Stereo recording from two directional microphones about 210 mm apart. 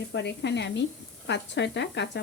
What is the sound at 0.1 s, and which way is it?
Speech, 55° left (ahead or behind).